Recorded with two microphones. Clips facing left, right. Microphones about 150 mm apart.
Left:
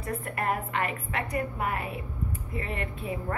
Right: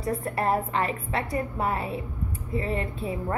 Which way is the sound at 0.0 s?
35° right (ahead or behind).